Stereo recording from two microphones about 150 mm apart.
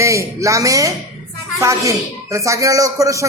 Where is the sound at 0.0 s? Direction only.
20° right (ahead or behind).